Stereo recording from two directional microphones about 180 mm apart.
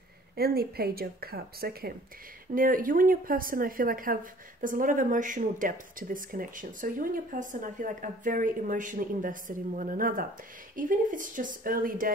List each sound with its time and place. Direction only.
0.4 s a woman's voice: 60° right (ahead or behind)